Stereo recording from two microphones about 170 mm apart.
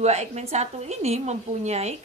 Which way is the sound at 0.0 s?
40° right (ahead or behind).